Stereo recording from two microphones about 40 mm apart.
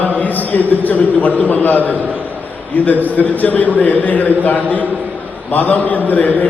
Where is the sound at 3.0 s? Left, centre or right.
Left.